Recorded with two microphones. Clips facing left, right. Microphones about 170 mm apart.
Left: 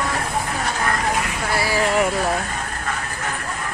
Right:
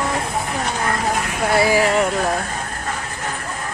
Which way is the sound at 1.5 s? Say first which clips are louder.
Right 6 dB; 20° right (ahead or behind).